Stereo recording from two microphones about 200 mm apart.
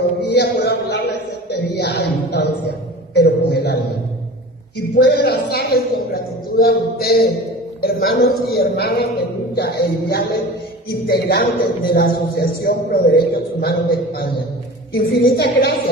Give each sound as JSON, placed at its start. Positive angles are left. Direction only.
{"t": 0.3, "sound": "a sound", "side_deg": 55}
{"t": 3.2, "sound": "a man's voice", "side_deg": 55}
{"t": 4.9, "sound": "a man's voice", "side_deg": 55}